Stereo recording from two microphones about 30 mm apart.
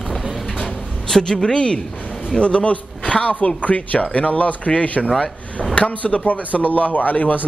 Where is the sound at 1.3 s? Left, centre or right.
Left.